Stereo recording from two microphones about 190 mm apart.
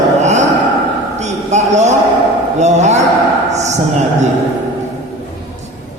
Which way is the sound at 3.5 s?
35° right (ahead or behind).